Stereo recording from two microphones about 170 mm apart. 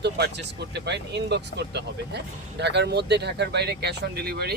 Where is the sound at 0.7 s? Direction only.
90° right; by 4.5 s 70° right (ahead or behind).